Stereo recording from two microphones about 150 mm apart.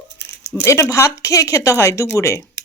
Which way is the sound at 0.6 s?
20° left (ahead or behind).